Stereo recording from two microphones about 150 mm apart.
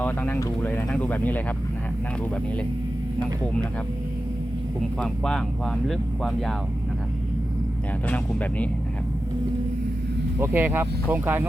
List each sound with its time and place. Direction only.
0.0 s speech: 15° left (ahead or behind)
4.9 s speech: 5° left (ahead or behind)
8.0 s speech: 10° left (ahead or behind)
10.4 s speech: 15° right (ahead or behind)